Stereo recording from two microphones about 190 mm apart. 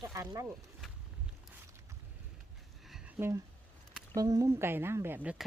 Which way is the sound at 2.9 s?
10° right (ahead or behind).